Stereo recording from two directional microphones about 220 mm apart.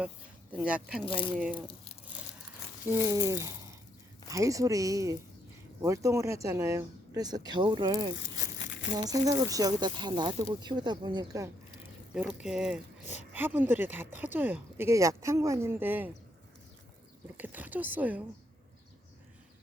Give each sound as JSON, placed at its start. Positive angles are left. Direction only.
{"t": 0.5, "sound": "speech", "side_deg": -5}
{"t": 1.0, "sound": "speech", "side_deg": 25}
{"t": 1.4, "sound": "speech", "side_deg": -5}
{"t": 3.0, "sound": "speech", "side_deg": -15}
{"t": 17.3, "sound": "speech", "side_deg": -10}